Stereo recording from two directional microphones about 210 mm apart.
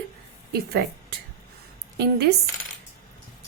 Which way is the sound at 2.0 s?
50° right (ahead or behind).